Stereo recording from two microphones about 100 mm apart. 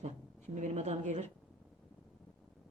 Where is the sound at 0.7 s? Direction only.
90° right.